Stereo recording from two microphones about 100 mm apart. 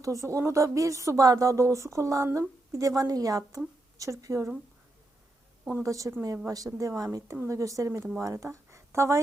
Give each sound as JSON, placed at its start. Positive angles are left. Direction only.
{"t": 0.0, "sound": "speech", "side_deg": -30}
{"t": 5.8, "sound": "speech", "side_deg": -35}